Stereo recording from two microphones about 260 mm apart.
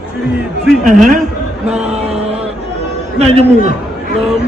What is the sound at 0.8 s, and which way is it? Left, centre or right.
Speech, right.